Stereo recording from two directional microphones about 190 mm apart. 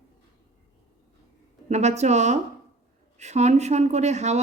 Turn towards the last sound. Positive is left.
turn(degrees=-35)  # may be behind; listen again after turning